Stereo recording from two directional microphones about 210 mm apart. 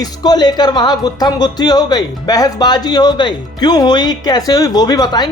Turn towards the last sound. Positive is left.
turn(degrees=20)  # may be behind; listen again after turning